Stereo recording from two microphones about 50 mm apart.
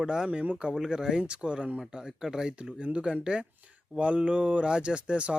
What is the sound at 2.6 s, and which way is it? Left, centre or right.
Speech, right.